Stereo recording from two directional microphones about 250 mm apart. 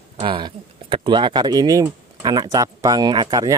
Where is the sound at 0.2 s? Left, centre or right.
Centre.